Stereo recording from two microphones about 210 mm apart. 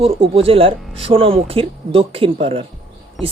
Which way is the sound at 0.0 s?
25° right (ahead or behind).